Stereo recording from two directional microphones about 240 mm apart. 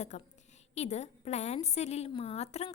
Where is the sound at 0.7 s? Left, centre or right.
Left.